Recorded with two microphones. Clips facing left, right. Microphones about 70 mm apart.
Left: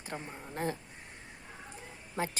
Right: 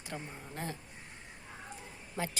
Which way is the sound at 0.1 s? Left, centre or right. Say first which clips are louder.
Left 2 dB; left.